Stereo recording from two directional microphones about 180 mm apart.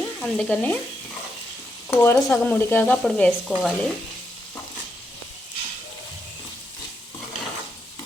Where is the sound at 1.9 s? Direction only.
15° left (ahead or behind).